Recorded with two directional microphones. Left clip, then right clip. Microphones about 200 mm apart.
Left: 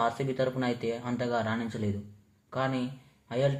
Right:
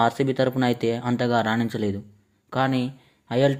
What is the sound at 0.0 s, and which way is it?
Speech, 45° right (ahead or behind).